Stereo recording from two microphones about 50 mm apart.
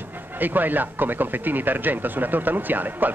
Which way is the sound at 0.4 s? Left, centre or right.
Right.